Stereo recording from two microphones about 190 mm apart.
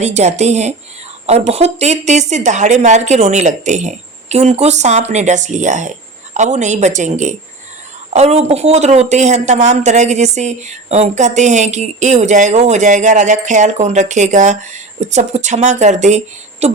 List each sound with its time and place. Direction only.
0.0 s speech: 35° right (ahead or behind)